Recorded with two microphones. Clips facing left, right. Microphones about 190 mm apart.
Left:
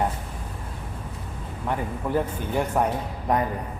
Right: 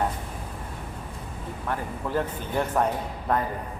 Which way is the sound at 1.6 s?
15° left (ahead or behind).